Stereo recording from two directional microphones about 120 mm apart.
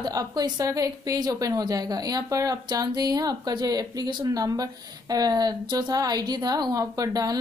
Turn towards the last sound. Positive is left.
turn(degrees=-30)  # may be behind; listen again after turning